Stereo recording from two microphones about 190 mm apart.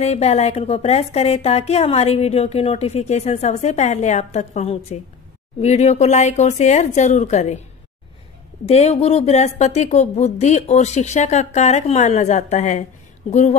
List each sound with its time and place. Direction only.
0.0 s a woman's voice: 35° left (ahead or behind)
8.6 s a woman's voice: 35° left (ahead or behind)